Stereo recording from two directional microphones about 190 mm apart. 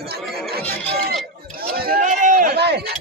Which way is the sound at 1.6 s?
50° right (ahead or behind).